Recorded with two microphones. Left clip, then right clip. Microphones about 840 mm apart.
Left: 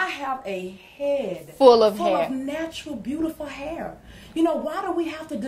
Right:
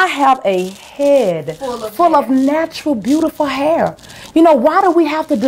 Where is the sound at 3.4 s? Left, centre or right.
Right.